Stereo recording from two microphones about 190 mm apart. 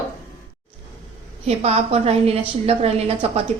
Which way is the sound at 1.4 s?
35° right (ahead or behind).